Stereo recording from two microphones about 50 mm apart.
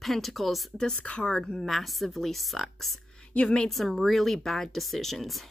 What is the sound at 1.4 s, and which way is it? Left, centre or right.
Speech, centre.